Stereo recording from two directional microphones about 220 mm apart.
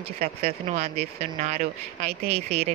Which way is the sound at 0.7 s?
30° right (ahead or behind).